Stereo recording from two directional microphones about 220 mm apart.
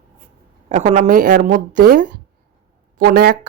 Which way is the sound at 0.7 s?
35° right (ahead or behind).